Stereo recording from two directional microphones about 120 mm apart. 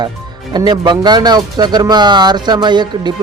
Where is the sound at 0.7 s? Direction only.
35° right (ahead or behind).